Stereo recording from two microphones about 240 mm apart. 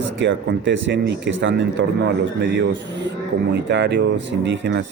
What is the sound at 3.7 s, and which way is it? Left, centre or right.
Speech, right.